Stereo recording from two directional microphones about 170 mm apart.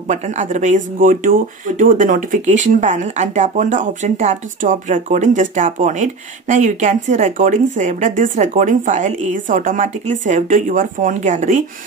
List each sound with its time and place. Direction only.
0.1 s speech: 45° right (ahead or behind)